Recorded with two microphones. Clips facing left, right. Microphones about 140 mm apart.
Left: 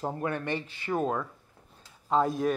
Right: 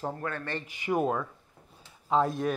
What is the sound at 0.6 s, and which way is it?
Speech, 15° right (ahead or behind).